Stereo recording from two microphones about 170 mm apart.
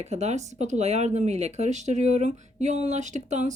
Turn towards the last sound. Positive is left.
turn(degrees=-45)  # may be behind; listen again after turning